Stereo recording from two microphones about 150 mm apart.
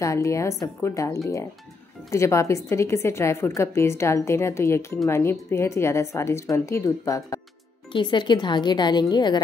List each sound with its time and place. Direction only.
0.0 s a woman's voice: 20° left (ahead or behind)